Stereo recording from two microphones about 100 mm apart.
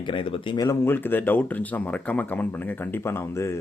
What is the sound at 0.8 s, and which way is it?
Speech, 20° left (ahead or behind).